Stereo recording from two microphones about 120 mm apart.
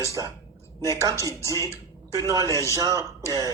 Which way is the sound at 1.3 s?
30° right (ahead or behind).